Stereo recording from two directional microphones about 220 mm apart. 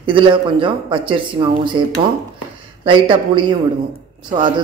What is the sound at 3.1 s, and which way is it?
Speech, 20° right (ahead or behind).